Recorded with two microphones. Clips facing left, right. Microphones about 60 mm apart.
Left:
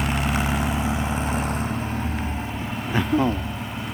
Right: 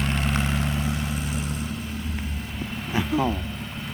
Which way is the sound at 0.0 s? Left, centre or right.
Centre.